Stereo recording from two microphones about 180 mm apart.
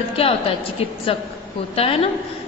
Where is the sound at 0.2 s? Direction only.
35° left (ahead or behind).